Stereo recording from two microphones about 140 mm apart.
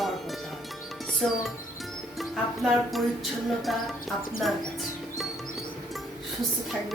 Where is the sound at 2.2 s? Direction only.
Centre (ahead or behind).